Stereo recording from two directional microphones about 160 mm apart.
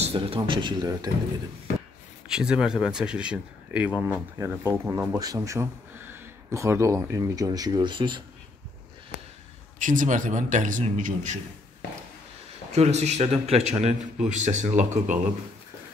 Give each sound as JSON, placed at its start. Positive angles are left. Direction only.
{"t": 0.0, "sound": "speech", "side_deg": -35}
{"t": 2.2, "sound": "speech", "side_deg": -5}
{"t": 9.8, "sound": "a man's voice", "side_deg": -55}
{"t": 12.7, "sound": "a man's voice", "side_deg": -45}